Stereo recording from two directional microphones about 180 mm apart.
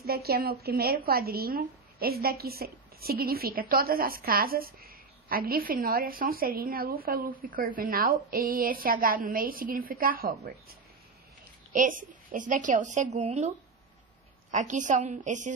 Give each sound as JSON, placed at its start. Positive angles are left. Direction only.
{"t": 0.0, "sound": "a woman's voice", "side_deg": -60}
{"t": 14.5, "sound": "a woman's voice", "side_deg": -45}